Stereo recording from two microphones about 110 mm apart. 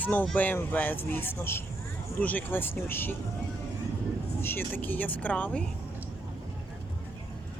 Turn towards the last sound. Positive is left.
turn(degrees=10)  # may be behind; listen again after turning